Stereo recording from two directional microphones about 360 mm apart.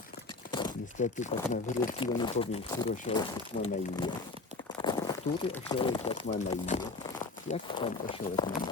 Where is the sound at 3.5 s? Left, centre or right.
Left.